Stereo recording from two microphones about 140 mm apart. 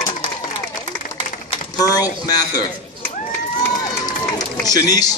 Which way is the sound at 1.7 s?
25° left (ahead or behind).